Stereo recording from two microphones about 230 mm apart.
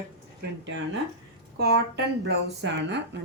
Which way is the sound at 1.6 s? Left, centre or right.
Right.